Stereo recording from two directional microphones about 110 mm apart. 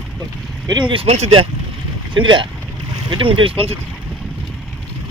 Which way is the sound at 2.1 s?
45° right (ahead or behind).